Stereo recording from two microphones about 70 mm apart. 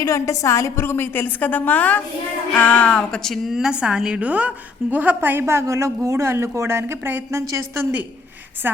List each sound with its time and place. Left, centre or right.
0.0 s a woman's voice: left; by 7.9 s right